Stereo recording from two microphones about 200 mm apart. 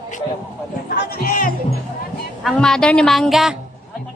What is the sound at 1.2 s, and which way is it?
Speech, 45° left (ahead or behind).